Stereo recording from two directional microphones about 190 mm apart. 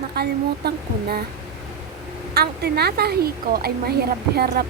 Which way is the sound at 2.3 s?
55° right (ahead or behind).